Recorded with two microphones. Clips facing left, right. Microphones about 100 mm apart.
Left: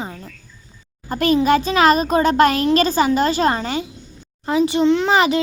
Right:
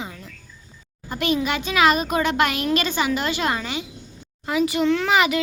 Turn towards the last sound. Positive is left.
turn(degrees=30)  # may be behind; listen again after turning